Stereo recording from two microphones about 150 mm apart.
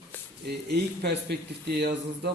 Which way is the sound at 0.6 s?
90° right.